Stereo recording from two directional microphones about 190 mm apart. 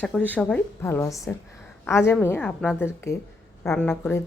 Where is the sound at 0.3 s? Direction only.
5° left (ahead or behind).